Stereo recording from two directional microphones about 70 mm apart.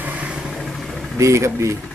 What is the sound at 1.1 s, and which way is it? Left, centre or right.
Speech, right.